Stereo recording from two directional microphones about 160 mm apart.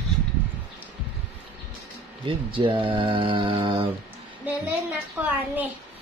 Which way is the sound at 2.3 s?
30° right (ahead or behind).